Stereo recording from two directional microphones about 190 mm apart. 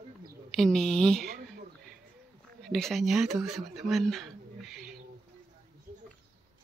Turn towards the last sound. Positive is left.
turn(degrees=0)  # may be behind; listen again after turning